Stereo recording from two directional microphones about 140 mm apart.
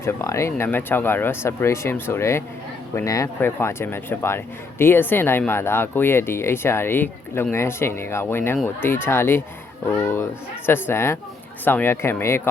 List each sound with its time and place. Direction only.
0.0 s a man's voice: 20° left (ahead or behind)